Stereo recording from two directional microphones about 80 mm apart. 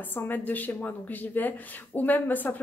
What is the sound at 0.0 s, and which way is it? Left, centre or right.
Speech, left.